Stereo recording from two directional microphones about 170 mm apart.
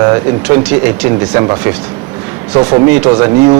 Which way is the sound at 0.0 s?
20° right (ahead or behind).